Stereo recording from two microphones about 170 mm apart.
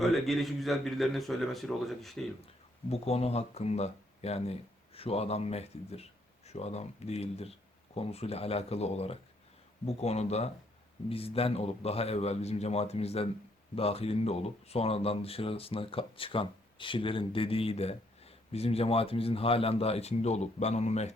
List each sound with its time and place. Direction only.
0.0 s a man's voice: centre (ahead or behind)
2.9 s speech: 40° left (ahead or behind)